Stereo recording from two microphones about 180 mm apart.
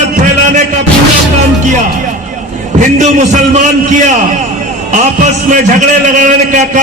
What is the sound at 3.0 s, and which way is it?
A man's voice, 45° right (ahead or behind).